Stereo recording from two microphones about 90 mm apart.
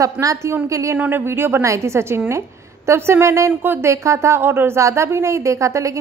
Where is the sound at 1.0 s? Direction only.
20° right (ahead or behind).